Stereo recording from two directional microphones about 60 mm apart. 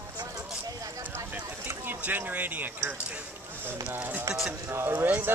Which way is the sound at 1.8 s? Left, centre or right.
Right.